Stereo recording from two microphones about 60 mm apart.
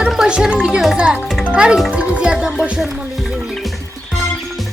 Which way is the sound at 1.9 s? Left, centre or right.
Centre.